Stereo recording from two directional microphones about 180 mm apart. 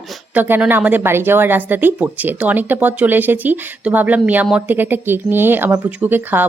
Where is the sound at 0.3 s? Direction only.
10° right (ahead or behind).